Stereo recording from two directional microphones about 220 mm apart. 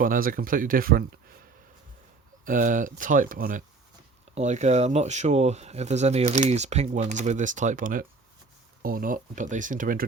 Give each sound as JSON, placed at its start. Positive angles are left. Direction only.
{"t": 0.0, "sound": "speech", "side_deg": -40}
{"t": 2.4, "sound": "speech", "side_deg": -35}